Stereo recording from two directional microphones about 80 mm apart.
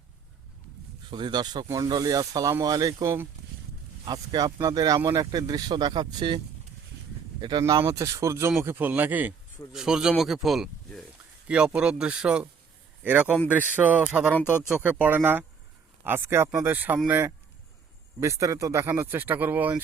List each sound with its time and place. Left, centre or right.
1.1 s speech: right
1.6 s speech: right
1.9 s speech: right
7.7 s speech: right
9.7 s speech: centre
11.4 s speech: centre
18.2 s speech: right